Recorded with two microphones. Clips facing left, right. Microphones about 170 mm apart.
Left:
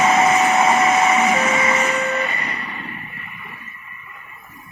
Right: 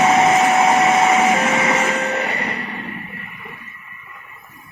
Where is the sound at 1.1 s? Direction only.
75° right (ahead or behind).